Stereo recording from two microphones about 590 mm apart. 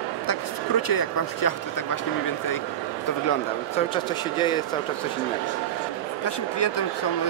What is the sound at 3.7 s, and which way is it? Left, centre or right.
Speech, centre.